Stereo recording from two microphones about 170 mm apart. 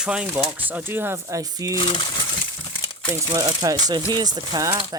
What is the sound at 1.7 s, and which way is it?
Speech, 25° left (ahead or behind).